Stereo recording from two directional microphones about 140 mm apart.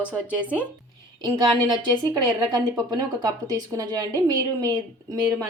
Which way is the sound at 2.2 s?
20° right (ahead or behind).